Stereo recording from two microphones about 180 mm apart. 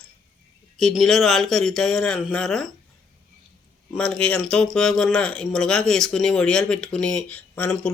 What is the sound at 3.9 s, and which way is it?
Speech, 5° left (ahead or behind).